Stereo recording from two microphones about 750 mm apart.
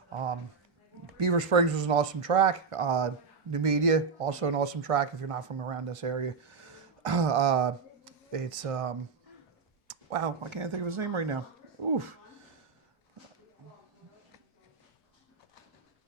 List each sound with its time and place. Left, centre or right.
0.1 s a sound: right
1.2 s speech: right
9.9 s speech: right